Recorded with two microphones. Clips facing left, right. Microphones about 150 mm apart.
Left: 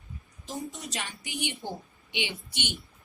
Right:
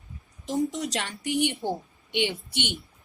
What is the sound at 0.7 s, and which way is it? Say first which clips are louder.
A woman's voice: right 7 dB; 80° right.